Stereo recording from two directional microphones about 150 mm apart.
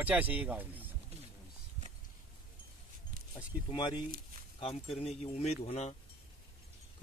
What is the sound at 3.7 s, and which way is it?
Speech, 30° left (ahead or behind).